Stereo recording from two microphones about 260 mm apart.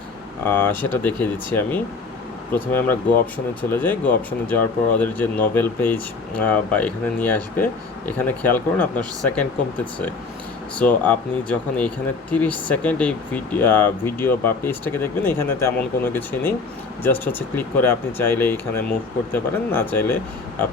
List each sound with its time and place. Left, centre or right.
0.4 s speech: centre
10.8 s speech: centre